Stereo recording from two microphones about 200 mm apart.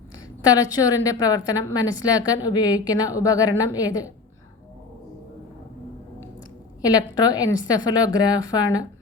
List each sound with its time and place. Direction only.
0.4 s a woman's voice: 20° left (ahead or behind)
6.8 s a woman's voice: 20° left (ahead or behind)